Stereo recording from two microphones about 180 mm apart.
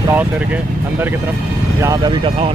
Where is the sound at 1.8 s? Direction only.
20° right (ahead or behind).